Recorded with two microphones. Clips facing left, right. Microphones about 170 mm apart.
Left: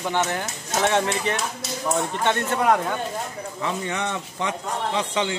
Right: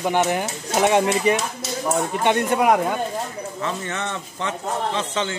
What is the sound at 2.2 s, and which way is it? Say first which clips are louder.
Speech: right 4 dB; 15° right (ahead or behind).